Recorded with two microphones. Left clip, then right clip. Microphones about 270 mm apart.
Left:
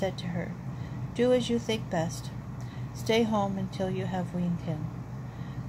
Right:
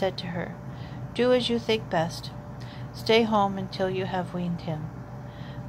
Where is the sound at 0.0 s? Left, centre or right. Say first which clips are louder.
Right 4 dB; right.